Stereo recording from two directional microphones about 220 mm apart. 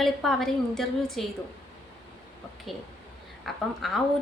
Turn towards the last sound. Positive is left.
turn(degrees=0)  # may be behind; listen again after turning